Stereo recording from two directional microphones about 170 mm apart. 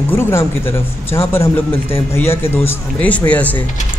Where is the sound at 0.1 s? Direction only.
15° left (ahead or behind).